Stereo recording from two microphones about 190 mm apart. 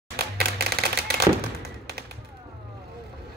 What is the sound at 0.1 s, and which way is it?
Music, 55° right (ahead or behind).